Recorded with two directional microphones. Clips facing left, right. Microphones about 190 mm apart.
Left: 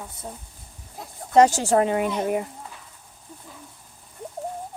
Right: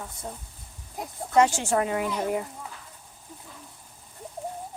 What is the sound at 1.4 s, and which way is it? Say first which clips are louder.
A woman's voice: left 5 dB; 40° left (ahead or behind).